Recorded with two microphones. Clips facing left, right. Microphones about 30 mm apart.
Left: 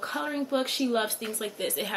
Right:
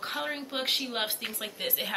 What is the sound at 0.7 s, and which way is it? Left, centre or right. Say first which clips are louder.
Speech: left 2 dB; right.